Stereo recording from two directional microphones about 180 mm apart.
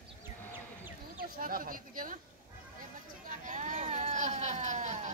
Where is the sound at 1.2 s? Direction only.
50° right (ahead or behind).